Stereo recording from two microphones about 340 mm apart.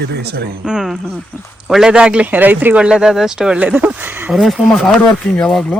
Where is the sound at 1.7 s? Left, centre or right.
Centre.